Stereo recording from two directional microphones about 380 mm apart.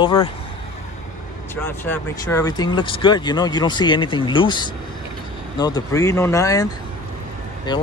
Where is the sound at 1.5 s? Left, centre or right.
Centre.